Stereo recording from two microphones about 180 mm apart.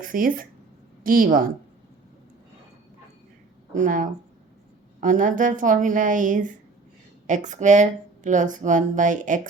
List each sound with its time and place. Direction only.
0.0 s speech: 50° right (ahead or behind)
3.8 s speech: 45° right (ahead or behind)